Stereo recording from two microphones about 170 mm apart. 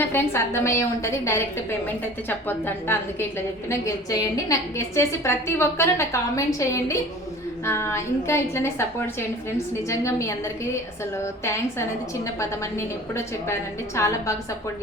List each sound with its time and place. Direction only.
0.0 s a woman's voice: 15° left (ahead or behind)
2.5 s a woman's voice: 10° left (ahead or behind)